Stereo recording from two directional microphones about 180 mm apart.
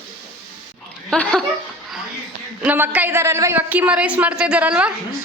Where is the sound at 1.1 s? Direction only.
5° left (ahead or behind).